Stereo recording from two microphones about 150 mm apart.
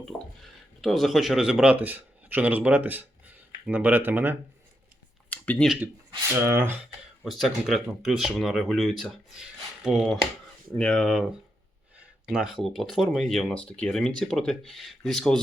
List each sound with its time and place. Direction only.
0.8 s speech: centre (ahead or behind)
5.3 s a sound: 10° left (ahead or behind)
5.6 s speech: 5° right (ahead or behind)
6.2 s speech: 15° right (ahead or behind)
7.3 s speech: centre (ahead or behind)